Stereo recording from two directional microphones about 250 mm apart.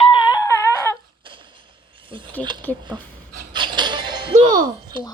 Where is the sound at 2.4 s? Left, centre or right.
Centre.